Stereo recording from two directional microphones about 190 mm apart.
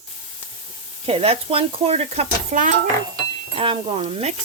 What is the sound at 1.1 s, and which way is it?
Speech, 30° right (ahead or behind).